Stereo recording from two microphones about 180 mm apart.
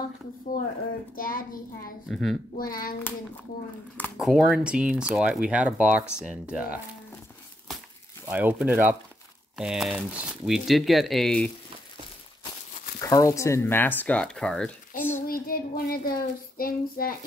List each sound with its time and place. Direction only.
1.1 s speech: 50° left (ahead or behind)
2.0 s speech: centre (ahead or behind)
2.5 s speech: 50° left (ahead or behind)
3.9 s speech: 5° left (ahead or behind)
8.3 s speech: 10° right (ahead or behind)
13.0 s speech: 15° left (ahead or behind)
15.2 s child singing: 55° left (ahead or behind)